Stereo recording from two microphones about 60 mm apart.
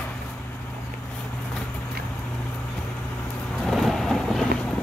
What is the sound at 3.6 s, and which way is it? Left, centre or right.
Vehicle, centre.